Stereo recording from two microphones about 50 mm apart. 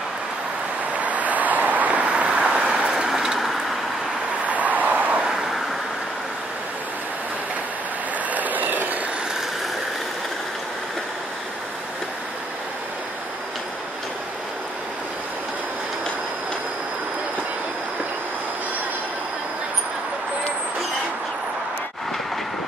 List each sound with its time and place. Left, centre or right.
1.0 s vehicle: right; by 3.6 s centre
4.5 s vehicle: right
8.3 s train: right